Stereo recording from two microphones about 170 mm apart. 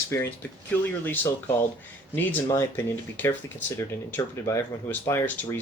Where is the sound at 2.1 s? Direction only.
10° left (ahead or behind).